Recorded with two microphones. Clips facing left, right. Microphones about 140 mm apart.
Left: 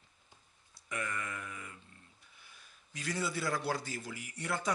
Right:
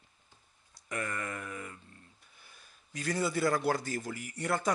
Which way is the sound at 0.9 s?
45° right (ahead or behind).